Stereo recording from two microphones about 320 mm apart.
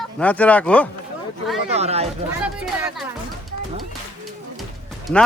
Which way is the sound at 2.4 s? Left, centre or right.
Centre.